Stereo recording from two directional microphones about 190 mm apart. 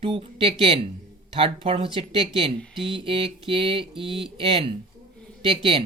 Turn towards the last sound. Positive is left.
turn(degrees=-30)  # may be behind; listen again after turning